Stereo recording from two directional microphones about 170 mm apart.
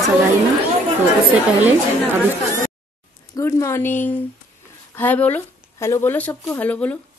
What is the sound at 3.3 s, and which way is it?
Speech, 15° left (ahead or behind).